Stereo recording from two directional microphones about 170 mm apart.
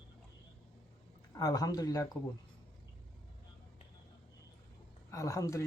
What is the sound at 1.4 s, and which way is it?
Speech, 20° left (ahead or behind).